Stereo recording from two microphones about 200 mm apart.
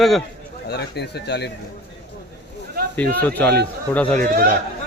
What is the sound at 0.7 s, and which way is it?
Speech, 55° left (ahead or behind).